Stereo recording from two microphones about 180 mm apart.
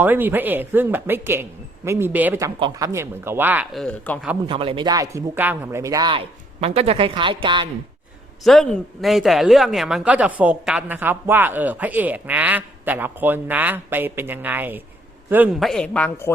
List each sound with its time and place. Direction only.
0.0 s speech: 10° right (ahead or behind)
2.6 s speech: 25° right (ahead or behind); by 4.2 s 5° left (ahead or behind)
4.4 s speech: 30° right (ahead or behind)
8.4 s speech: 5° left (ahead or behind)
15.6 s a woman's voice: 5° left (ahead or behind)